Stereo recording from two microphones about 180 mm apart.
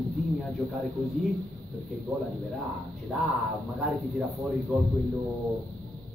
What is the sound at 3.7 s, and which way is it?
Speech, centre (ahead or behind).